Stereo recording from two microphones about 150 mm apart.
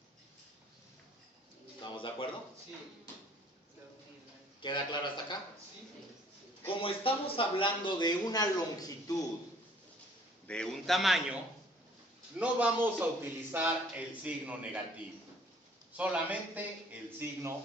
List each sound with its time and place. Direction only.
1.8 s a sound: 35° left (ahead or behind)
4.6 s a man's voice: 30° left (ahead or behind)
6.7 s speech: 35° left (ahead or behind)
10.4 s a man's voice: 5° left (ahead or behind)
12.4 s a man's voice: 10° right (ahead or behind)